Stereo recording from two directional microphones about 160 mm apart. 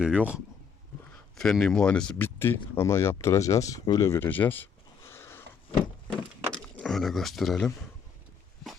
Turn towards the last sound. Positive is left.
turn(degrees=0)  # may be behind; listen again after turning